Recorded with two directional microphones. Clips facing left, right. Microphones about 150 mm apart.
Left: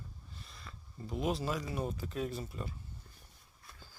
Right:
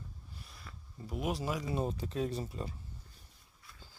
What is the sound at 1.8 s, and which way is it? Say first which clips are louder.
Speech: right 2 dB; 30° right (ahead or behind).